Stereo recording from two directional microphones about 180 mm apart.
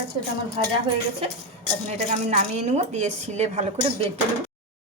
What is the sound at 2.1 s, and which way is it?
Speech, 35° right (ahead or behind).